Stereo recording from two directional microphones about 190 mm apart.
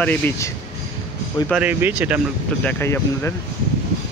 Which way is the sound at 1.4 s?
5° right (ahead or behind).